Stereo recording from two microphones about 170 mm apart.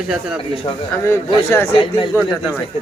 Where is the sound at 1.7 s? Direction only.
30° left (ahead or behind).